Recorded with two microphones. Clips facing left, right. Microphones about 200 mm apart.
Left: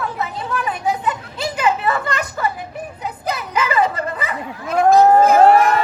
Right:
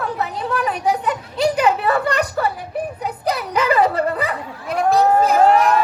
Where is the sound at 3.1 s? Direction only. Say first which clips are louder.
Right 3 dB; 35° right (ahead or behind).